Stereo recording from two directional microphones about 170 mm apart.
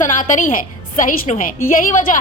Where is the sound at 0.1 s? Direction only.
50° left (ahead or behind).